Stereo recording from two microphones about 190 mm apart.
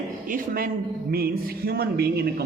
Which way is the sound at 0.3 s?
50° right (ahead or behind).